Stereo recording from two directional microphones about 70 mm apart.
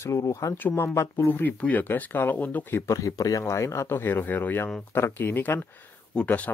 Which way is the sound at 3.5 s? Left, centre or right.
Left.